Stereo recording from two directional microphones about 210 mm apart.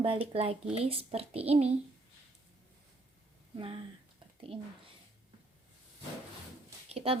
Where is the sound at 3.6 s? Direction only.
25° right (ahead or behind).